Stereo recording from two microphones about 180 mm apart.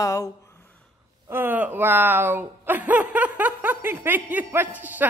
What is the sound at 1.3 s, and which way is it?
Speech, 10° right (ahead or behind).